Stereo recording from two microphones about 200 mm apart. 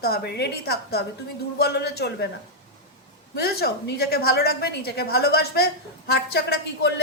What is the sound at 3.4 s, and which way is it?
A woman's voice, 50° left (ahead or behind).